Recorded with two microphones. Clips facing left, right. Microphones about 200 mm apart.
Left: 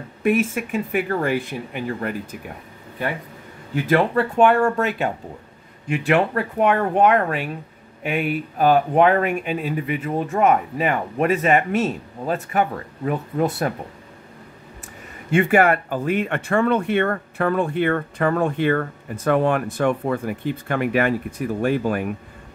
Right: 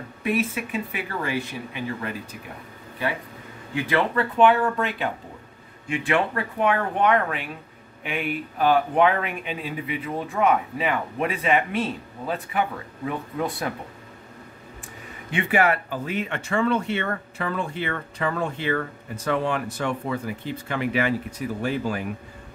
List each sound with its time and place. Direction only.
0.2 s speech: 50° left (ahead or behind)
3.7 s speech: 45° left (ahead or behind)
15.3 s speech: 50° left (ahead or behind)